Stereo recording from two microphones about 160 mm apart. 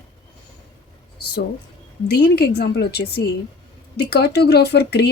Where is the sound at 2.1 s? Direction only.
90° left.